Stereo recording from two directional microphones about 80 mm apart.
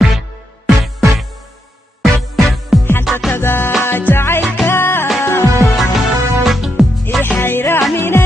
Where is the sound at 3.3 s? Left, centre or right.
Left.